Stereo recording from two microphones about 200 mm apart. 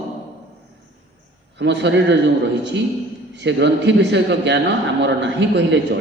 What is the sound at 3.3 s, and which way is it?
A man's voice, 60° right (ahead or behind).